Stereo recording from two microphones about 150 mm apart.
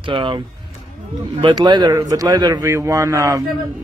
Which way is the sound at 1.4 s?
30° right (ahead or behind).